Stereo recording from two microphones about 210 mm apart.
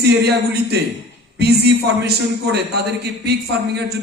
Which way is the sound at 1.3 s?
50° right (ahead or behind).